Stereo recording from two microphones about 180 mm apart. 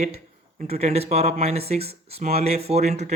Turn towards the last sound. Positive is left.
turn(degrees=-40)  # may be behind; listen again after turning